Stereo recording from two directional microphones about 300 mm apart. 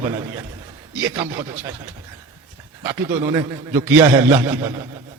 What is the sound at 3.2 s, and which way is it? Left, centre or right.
A man's voice, centre.